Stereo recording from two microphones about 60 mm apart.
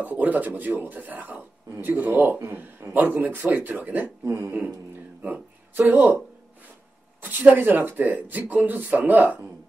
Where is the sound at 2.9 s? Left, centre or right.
Right.